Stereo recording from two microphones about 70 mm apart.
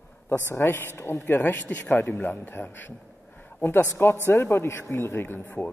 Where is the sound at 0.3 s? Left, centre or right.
Left.